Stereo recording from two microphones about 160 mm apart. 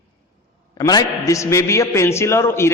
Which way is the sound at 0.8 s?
20° left (ahead or behind).